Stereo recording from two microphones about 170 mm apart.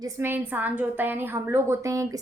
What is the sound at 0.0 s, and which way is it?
A woman's voice, 15° right (ahead or behind).